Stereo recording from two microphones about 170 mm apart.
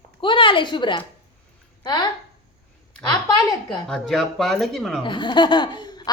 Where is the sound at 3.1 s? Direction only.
25° left (ahead or behind).